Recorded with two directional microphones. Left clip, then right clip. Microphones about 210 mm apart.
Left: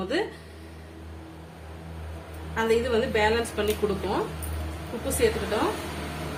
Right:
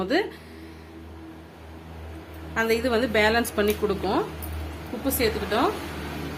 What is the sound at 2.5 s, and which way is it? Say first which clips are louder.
Speech: even; 50° right (ahead or behind).